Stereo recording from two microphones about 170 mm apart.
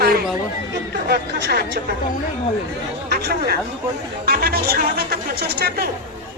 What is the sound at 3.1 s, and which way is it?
Speech, 65° right (ahead or behind).